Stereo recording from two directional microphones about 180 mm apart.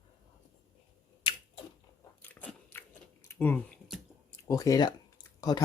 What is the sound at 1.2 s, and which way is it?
Finger snapping, 30° left (ahead or behind).